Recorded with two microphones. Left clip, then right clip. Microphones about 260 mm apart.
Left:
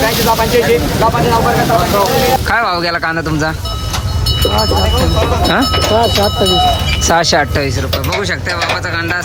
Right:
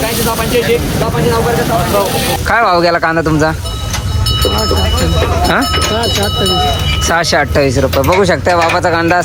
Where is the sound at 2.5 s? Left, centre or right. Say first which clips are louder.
Right 4 dB; centre.